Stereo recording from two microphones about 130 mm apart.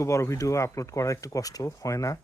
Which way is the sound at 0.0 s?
20° left (ahead or behind).